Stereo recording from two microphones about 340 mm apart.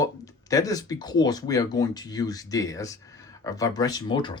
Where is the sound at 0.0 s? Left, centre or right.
Centre.